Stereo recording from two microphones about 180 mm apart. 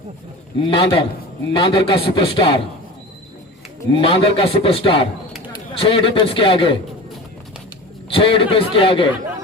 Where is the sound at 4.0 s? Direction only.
30° left (ahead or behind).